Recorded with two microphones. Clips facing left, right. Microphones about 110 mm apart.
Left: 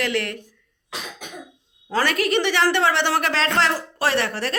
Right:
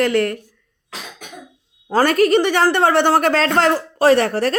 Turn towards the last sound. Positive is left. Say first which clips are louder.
# right 8 dB
turn(degrees=-40)  # may be behind; listen again after turning